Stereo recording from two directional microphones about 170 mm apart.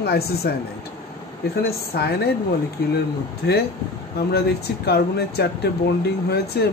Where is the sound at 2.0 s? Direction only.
70° left (ahead or behind).